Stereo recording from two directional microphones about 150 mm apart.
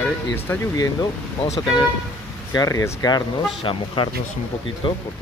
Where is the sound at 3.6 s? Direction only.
35° left (ahead or behind).